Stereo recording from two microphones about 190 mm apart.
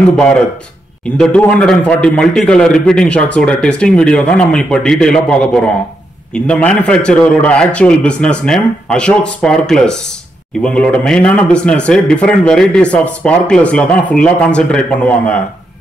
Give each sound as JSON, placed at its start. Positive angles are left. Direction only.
{"t": 1.1, "sound": "speech", "side_deg": 5}